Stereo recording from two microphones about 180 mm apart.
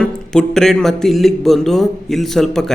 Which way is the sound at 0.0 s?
5° left (ahead or behind).